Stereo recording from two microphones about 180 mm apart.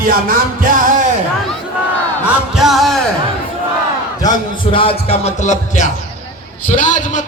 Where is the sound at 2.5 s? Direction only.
Centre (ahead or behind).